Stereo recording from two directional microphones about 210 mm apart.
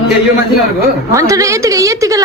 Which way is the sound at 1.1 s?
15° right (ahead or behind).